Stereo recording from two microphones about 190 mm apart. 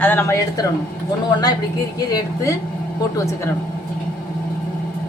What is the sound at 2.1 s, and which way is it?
Speech, 20° left (ahead or behind).